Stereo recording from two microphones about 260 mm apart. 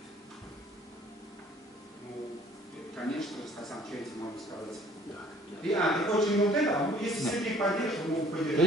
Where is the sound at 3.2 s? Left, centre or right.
Centre.